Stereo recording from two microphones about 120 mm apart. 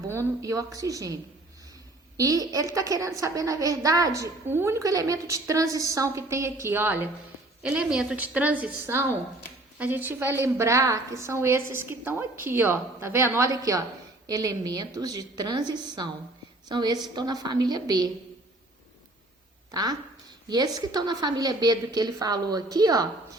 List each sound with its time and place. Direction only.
0.1 s a woman's voice: 25° right (ahead or behind)
19.7 s a woman's voice: 35° right (ahead or behind)